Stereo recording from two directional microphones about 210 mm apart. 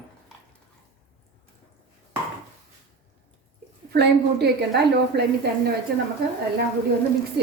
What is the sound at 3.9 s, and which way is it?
A woman's voice, 50° right (ahead or behind).